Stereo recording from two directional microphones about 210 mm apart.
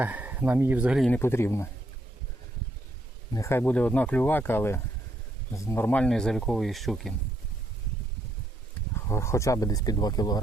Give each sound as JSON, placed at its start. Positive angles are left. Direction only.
{"t": 0.0, "sound": "speech", "side_deg": -10}
{"t": 3.3, "sound": "speech", "side_deg": 10}
{"t": 9.0, "sound": "speech", "side_deg": 15}